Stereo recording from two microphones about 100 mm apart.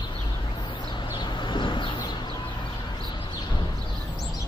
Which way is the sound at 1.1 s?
50° left (ahead or behind).